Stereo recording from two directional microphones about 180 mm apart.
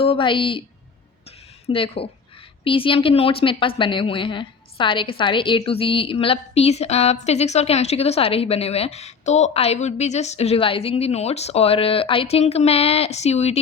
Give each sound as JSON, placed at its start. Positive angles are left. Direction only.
{"t": 0.0, "sound": "a woman's voice", "side_deg": 30}
{"t": 1.6, "sound": "a woman's voice", "side_deg": 30}